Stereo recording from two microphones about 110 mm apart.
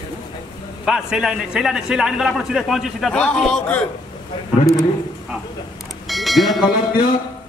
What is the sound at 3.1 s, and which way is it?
Speech, 10° left (ahead or behind).